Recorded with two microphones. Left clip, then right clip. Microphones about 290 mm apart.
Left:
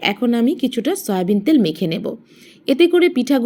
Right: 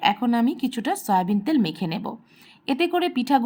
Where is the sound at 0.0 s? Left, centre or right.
Centre.